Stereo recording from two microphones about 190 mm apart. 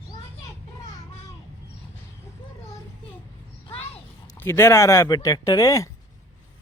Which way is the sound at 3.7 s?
30° left (ahead or behind).